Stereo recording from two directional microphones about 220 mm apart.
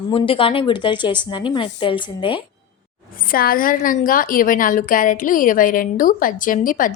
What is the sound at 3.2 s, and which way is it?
A woman's voice, 40° left (ahead or behind).